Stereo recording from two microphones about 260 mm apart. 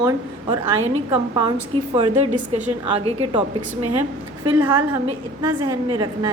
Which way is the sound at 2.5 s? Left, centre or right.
Right.